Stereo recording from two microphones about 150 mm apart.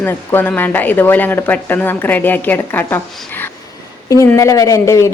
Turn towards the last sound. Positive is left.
turn(degrees=20)  # may be behind; listen again after turning